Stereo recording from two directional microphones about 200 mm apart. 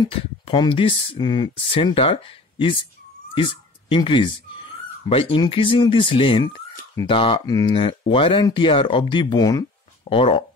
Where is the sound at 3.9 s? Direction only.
25° left (ahead or behind).